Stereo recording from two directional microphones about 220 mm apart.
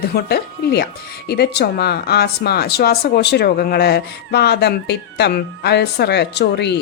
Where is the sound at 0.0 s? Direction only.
45° left (ahead or behind).